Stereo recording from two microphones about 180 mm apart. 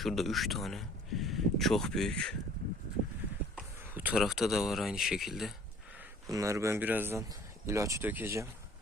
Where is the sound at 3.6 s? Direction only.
5° right (ahead or behind).